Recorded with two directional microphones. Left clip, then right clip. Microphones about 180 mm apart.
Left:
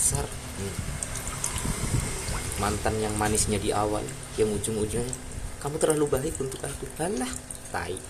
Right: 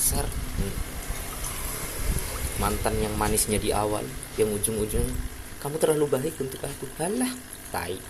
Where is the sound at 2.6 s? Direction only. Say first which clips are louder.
Right 1 dB; centre (ahead or behind).